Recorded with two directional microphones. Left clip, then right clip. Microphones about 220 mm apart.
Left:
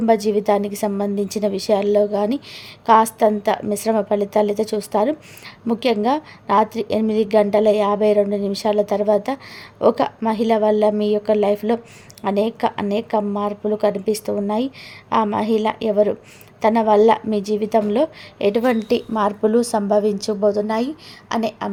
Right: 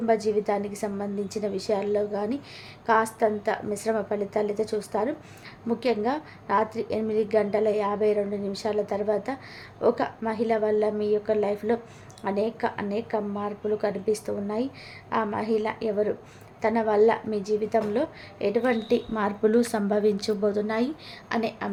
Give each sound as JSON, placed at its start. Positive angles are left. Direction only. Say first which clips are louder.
{"t": 0.0, "sound": "a woman's voice", "louder": "left 7 dB", "side_deg": 45}